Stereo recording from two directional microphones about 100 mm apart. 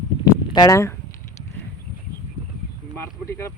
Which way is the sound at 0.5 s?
45° left (ahead or behind).